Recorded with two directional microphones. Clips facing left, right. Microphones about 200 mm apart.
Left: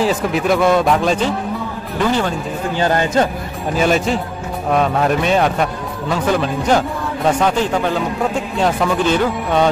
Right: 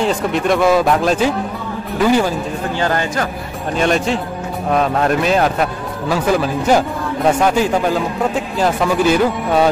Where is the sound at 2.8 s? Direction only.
20° left (ahead or behind).